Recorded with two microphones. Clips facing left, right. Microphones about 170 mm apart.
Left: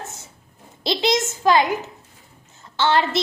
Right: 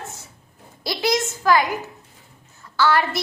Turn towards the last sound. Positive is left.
turn(degrees=25)  # may be behind; listen again after turning